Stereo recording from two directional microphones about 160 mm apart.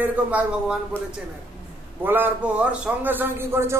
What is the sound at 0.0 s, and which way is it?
Speech, 10° right (ahead or behind).